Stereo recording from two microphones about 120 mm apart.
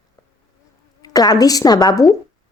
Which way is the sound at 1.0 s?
30° left (ahead or behind).